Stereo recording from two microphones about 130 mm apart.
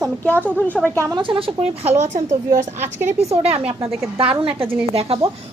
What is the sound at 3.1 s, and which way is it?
Speech, 50° right (ahead or behind).